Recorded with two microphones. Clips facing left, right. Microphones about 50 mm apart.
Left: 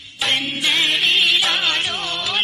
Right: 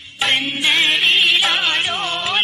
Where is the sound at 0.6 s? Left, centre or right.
Centre.